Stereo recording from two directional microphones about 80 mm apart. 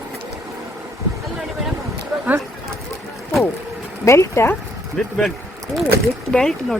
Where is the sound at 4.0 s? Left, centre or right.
Left.